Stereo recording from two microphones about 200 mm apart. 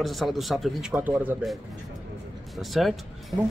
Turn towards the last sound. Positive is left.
turn(degrees=0)  # may be behind; listen again after turning